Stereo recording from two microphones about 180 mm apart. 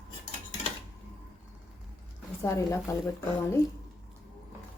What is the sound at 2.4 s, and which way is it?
Speech, 15° left (ahead or behind).